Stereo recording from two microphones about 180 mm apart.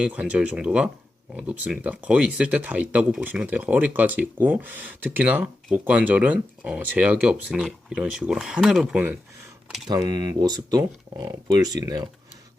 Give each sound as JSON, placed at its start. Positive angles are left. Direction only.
{"t": 0.0, "sound": "speech", "side_deg": -5}
{"t": 9.8, "sound": "speech", "side_deg": -25}